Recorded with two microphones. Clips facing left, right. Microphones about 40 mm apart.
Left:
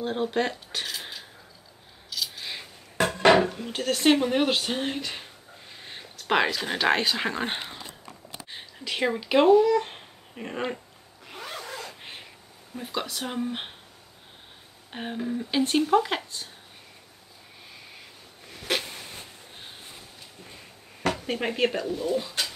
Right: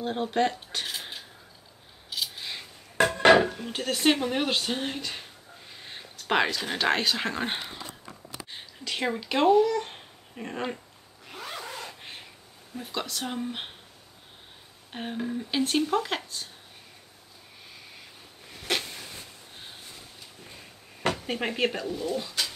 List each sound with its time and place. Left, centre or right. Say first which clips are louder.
0.0 s speech: even; centre
2.1 s a sound: even; right
3.3 s speech: even; centre
11.2 s zipper: even; centre
11.9 s a sound: left 1 dB; centre
12.7 s speech: left 1 dB; centre
14.9 s speech: left 1 dB; centre
18.5 s a sound: left 1 dB; centre
21.3 s speech: left 4 dB; centre